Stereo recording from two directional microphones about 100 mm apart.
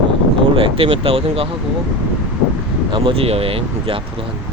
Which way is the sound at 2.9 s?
60° right (ahead or behind).